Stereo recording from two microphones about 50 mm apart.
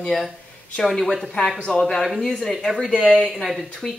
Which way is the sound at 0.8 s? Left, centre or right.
Centre.